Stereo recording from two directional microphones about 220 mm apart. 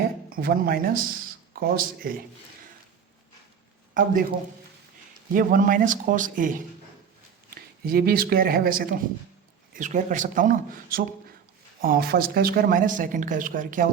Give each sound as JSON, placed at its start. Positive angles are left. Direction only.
{"t": 0.3, "sound": "speech", "side_deg": -40}
{"t": 3.9, "sound": "speech", "side_deg": -40}
{"t": 5.3, "sound": "speech", "side_deg": -40}